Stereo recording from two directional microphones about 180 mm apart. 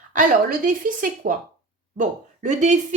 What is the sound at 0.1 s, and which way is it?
A woman's voice, 45° right (ahead or behind).